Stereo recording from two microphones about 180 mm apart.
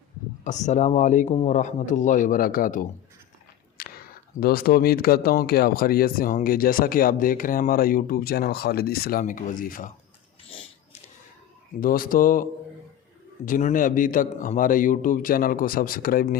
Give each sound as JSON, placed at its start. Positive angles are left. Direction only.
{"t": 0.4, "sound": "a man's voice", "side_deg": 40}
{"t": 3.8, "sound": "a sound", "side_deg": 60}
{"t": 4.4, "sound": "speech", "side_deg": 55}
{"t": 11.8, "sound": "a man's voice", "side_deg": 55}